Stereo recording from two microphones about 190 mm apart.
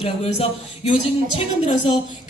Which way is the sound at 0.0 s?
35° left (ahead or behind).